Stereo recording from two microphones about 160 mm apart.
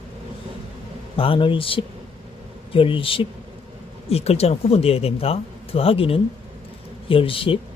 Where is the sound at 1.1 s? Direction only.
35° left (ahead or behind).